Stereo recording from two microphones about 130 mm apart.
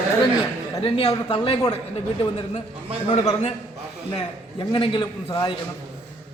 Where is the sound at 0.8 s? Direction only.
45° left (ahead or behind).